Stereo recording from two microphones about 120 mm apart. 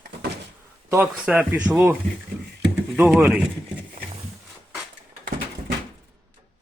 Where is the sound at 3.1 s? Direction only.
5° right (ahead or behind).